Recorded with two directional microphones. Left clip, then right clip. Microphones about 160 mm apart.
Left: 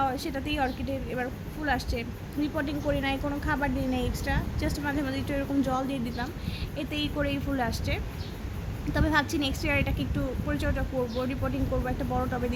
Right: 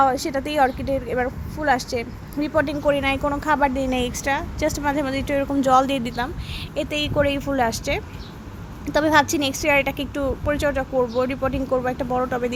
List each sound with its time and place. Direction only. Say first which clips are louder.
0.0 s speech: right 10 dB; 40° right (ahead or behind)
5.7 s speech: right 13 dB; 65° right (ahead or behind)
6.7 s speech: right 10 dB; 45° right (ahead or behind)